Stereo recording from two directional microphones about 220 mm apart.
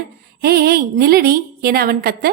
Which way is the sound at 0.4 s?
45° right (ahead or behind).